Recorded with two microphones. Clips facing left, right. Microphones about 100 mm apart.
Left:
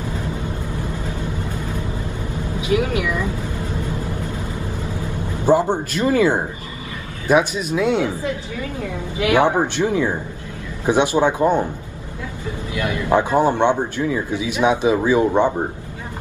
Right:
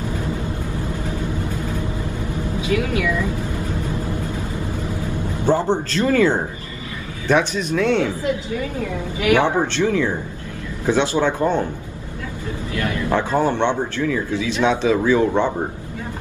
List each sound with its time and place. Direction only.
2.7 s speech: 20° left (ahead or behind)
5.4 s a man's voice: 10° left (ahead or behind)
9.2 s a man's voice: 15° left (ahead or behind)
12.7 s a man's voice: 15° left (ahead or behind)